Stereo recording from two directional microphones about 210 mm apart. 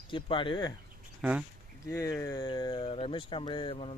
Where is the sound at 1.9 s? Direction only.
15° left (ahead or behind).